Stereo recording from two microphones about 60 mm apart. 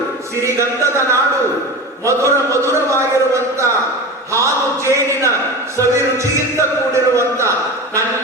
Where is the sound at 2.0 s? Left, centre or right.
Right.